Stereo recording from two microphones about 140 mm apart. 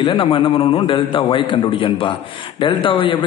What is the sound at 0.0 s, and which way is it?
A man's voice, 35° left (ahead or behind).